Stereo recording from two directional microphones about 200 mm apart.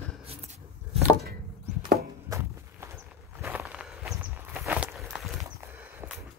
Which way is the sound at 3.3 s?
10° right (ahead or behind).